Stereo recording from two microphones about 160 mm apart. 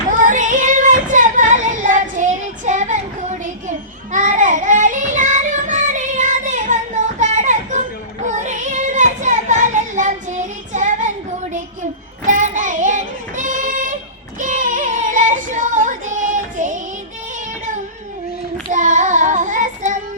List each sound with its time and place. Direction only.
0.2 s child singing: 50° right (ahead or behind)
18.7 s child singing: 50° right (ahead or behind)